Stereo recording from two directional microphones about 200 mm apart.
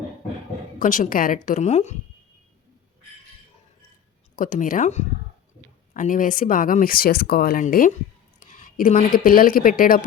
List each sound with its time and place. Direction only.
0.8 s a woman's voice: 40° left (ahead or behind)
4.4 s a woman's voice: 40° left (ahead or behind)